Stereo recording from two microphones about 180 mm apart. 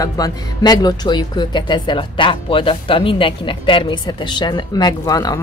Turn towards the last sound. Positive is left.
turn(degrees=20)  # may be behind; listen again after turning